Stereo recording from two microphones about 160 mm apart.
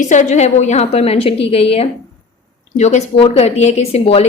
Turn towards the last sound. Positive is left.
turn(degrees=40)  # may be behind; listen again after turning